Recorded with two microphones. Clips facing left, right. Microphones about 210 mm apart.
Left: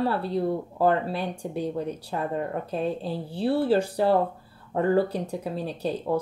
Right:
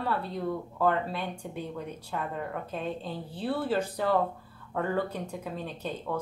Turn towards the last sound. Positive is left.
turn(degrees=35)  # may be behind; listen again after turning